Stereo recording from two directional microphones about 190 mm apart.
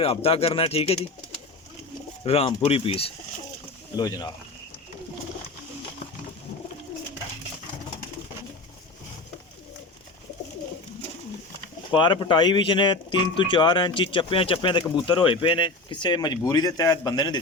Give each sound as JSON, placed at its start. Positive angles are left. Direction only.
{"t": 0.0, "sound": "speech", "side_deg": 30}
{"t": 2.2, "sound": "speech", "side_deg": 30}
{"t": 11.9, "sound": "speech", "side_deg": 25}